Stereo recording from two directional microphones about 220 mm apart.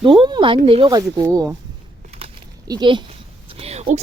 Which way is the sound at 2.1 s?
20° right (ahead or behind).